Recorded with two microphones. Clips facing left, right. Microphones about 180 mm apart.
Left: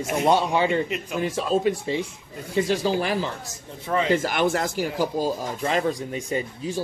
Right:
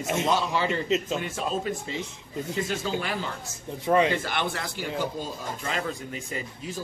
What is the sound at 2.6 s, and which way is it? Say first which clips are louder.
Speech: left 7 dB; 35° left (ahead or behind).